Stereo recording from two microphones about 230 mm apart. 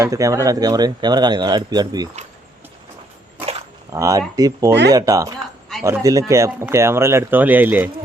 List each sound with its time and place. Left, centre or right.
0.0 s speech: centre
3.9 s speech: centre